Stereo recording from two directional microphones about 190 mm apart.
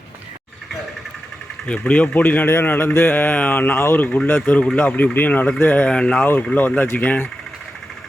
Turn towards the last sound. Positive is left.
turn(degrees=10)  # may be behind; listen again after turning